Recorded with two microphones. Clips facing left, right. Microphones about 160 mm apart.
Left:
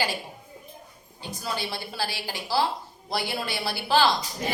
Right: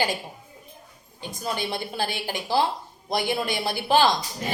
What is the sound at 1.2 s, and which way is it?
A woman's voice, 20° right (ahead or behind).